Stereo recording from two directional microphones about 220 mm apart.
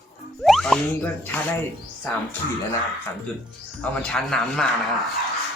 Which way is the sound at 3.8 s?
5° left (ahead or behind).